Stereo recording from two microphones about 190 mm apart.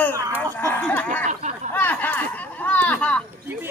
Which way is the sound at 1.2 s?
40° right (ahead or behind).